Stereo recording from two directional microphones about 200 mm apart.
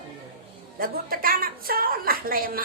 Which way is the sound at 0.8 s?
45° right (ahead or behind).